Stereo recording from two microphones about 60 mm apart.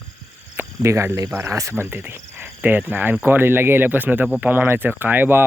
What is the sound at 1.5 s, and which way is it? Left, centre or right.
Speech, right.